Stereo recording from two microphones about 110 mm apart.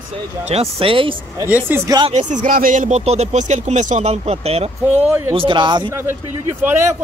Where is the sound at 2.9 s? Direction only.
90° right; by 4.6 s 70° right (ahead or behind).